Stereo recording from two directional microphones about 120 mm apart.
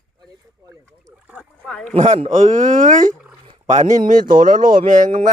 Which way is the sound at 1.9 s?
75° right (ahead or behind).